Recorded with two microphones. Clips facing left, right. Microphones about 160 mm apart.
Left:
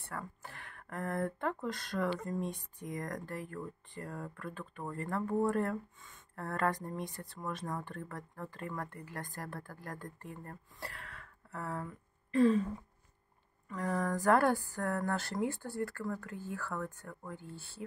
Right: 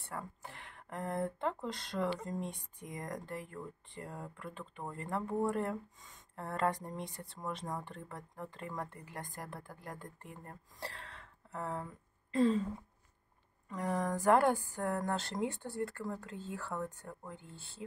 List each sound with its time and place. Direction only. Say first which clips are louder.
0.0 s speech: even; 20° right (ahead or behind)
13.7 s speech: left 1 dB; 20° right (ahead or behind)